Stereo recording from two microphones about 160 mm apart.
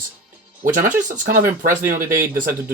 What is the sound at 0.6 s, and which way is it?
Speech, 55° right (ahead or behind).